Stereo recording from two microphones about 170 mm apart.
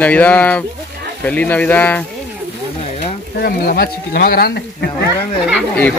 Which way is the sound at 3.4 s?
65° left (ahead or behind).